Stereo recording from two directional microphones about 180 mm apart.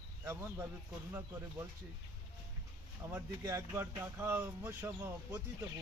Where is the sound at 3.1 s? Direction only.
15° right (ahead or behind).